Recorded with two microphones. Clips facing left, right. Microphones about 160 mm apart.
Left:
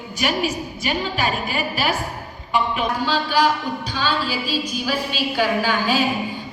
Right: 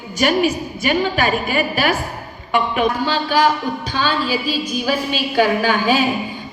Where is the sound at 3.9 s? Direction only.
50° right (ahead or behind).